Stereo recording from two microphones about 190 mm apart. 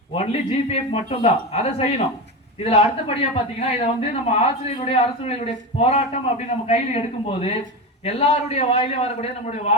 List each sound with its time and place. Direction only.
0.1 s a man's voice: 30° left (ahead or behind)